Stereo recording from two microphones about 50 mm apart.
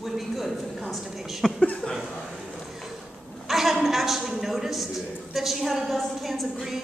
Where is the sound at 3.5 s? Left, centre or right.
Centre.